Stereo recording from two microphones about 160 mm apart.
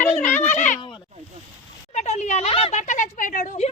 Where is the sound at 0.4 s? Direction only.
50° left (ahead or behind).